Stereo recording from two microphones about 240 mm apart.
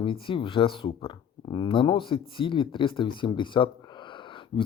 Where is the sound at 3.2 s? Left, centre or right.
Centre.